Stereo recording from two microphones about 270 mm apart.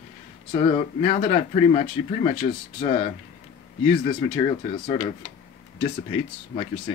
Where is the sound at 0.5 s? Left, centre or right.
Left.